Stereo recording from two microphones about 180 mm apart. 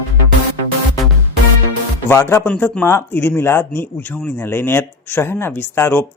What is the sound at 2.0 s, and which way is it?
A man's voice, 15° left (ahead or behind).